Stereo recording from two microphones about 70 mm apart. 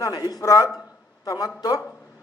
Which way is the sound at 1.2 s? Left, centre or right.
Left.